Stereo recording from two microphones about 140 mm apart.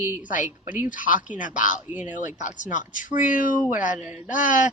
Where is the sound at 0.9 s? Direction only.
70° left (ahead or behind).